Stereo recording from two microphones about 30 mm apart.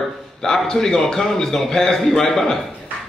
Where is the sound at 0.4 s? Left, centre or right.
Centre.